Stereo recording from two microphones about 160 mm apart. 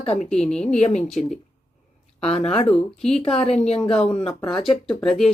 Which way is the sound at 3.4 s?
40° left (ahead or behind).